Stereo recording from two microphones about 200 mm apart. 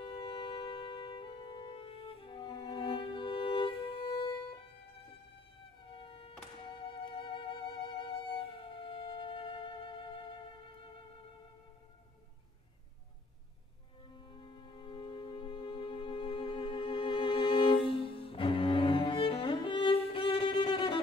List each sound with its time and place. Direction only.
0.0 s music: 25° left (ahead or behind)
5.9 s music: 25° left (ahead or behind)
14.1 s music: 25° left (ahead or behind)